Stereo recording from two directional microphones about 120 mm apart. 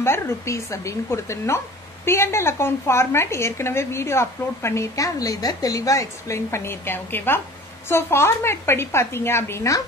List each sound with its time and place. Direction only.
0.0 s a woman's voice: 20° left (ahead or behind)